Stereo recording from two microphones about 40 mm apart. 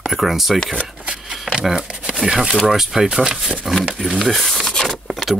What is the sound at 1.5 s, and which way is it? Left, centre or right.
Shuffling cards, right.